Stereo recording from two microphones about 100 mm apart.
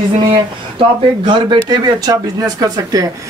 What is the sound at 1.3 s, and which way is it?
Speech, 50° right (ahead or behind).